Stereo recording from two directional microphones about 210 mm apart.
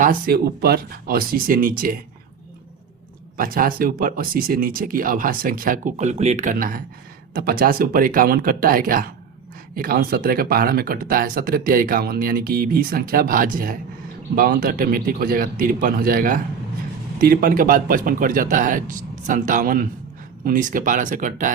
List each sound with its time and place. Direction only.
0.0 s speech: 45° right (ahead or behind)
3.3 s speech: 45° right (ahead or behind)